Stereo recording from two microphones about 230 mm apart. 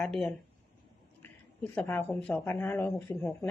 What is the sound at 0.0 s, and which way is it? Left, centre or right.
A woman's voice, centre.